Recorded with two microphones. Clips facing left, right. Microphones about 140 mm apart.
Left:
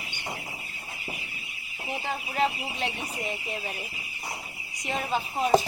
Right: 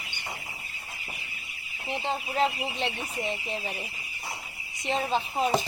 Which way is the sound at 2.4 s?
Centre (ahead or behind).